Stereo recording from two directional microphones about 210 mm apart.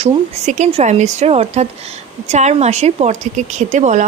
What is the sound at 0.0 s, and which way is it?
Speech, 30° right (ahead or behind).